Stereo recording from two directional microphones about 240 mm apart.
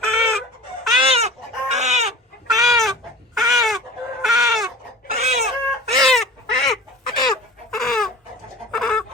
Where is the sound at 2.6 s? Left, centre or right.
Centre.